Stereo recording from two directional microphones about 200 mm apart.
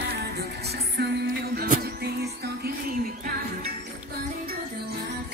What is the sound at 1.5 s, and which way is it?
Music, 45° right (ahead or behind).